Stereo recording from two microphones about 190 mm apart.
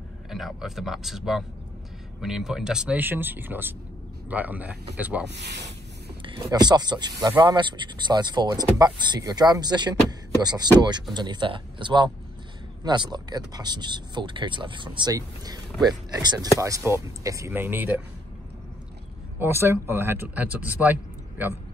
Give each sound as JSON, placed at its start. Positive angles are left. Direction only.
{"t": 0.3, "sound": "speech", "side_deg": 0}
{"t": 6.2, "sound": "speech", "side_deg": -20}
{"t": 19.3, "sound": "speech", "side_deg": -10}